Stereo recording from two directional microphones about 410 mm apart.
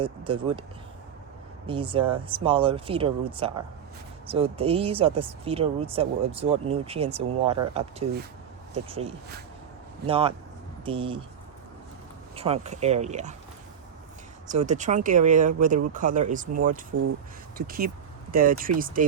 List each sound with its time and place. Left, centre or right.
0.0 s speech: centre
1.6 s speech: centre
12.4 s speech: centre
14.5 s speech: centre